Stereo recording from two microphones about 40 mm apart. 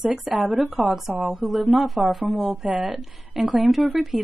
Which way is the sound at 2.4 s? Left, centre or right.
Centre.